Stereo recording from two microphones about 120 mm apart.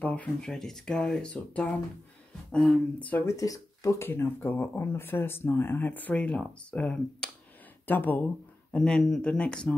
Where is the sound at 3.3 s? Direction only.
30° left (ahead or behind); by 9.7 s 10° left (ahead or behind).